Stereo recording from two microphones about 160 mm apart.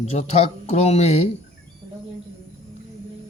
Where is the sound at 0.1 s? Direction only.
45° left (ahead or behind).